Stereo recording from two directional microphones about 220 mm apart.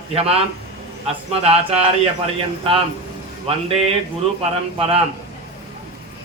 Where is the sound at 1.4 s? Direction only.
25° right (ahead or behind).